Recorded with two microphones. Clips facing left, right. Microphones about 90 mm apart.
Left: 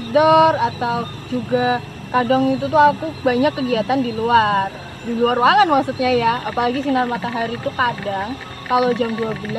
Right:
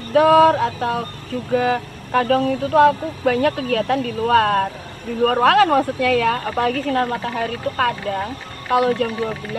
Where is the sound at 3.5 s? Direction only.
55° right (ahead or behind).